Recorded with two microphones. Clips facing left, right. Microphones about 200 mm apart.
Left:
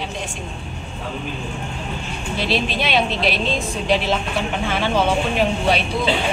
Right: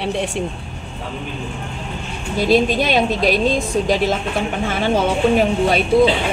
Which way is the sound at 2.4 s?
45° right (ahead or behind).